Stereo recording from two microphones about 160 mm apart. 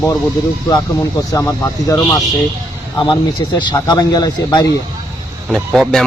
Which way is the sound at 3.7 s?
25° left (ahead or behind).